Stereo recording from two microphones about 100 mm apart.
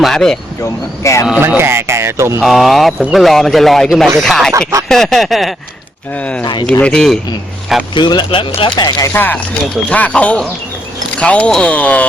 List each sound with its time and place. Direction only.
0.0 s speech: 5° left (ahead or behind)
0.6 s speech: 30° left (ahead or behind)
1.4 s speech: 20° right (ahead or behind)
2.4 s speech: centre (ahead or behind)
6.1 s speech: 15° left (ahead or behind)
6.4 s speech: 50° left (ahead or behind)
6.8 s speech: 5° left (ahead or behind)
7.9 s speech: 50° left (ahead or behind)
9.1 s speech: 20° left (ahead or behind)